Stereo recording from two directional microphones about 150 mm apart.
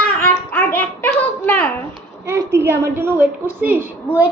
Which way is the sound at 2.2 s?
15° right (ahead or behind).